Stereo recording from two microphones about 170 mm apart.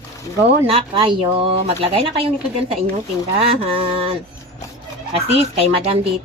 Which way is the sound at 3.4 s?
35° right (ahead or behind).